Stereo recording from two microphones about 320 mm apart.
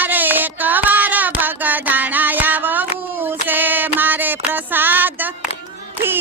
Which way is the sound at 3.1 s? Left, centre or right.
Centre.